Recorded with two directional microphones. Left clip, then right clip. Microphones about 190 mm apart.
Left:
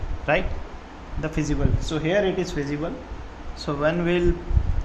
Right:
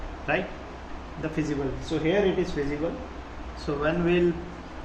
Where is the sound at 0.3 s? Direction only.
55° left (ahead or behind).